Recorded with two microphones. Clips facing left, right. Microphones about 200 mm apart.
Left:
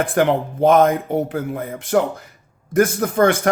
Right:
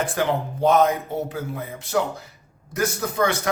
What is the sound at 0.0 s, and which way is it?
A man's voice, 55° left (ahead or behind).